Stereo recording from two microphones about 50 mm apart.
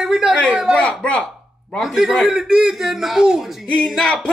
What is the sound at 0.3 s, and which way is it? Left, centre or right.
Speech, right.